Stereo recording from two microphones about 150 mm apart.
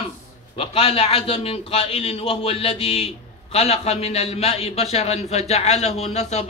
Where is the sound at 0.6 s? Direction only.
40° left (ahead or behind).